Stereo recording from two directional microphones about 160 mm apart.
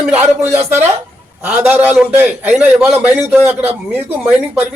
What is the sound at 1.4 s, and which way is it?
A man's voice, 10° right (ahead or behind).